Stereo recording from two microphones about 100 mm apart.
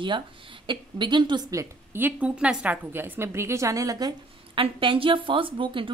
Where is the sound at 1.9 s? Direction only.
15° right (ahead or behind); by 4.1 s 40° right (ahead or behind).